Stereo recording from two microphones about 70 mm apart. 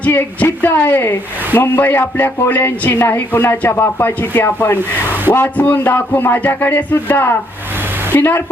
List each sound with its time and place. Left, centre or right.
0.0 s speech: left
4.8 s speech: right
5.3 s speech: left